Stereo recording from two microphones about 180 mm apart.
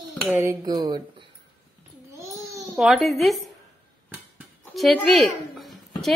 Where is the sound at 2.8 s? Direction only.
Centre (ahead or behind).